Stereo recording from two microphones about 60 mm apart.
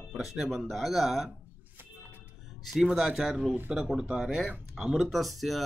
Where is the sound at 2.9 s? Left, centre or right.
Centre.